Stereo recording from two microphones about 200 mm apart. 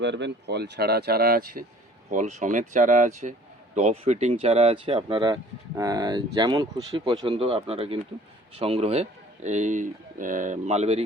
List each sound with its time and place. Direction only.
0.0 s speech: 60° right (ahead or behind); by 11.0 s 35° right (ahead or behind)